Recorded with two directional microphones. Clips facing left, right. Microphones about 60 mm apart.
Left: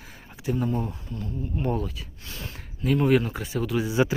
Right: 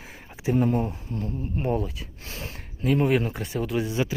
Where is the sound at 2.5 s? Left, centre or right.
Centre.